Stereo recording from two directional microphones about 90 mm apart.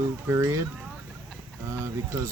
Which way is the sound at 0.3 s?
30° right (ahead or behind).